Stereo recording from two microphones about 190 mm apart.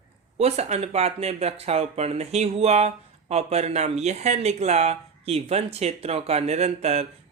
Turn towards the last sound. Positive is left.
turn(degrees=-35)  # may be behind; listen again after turning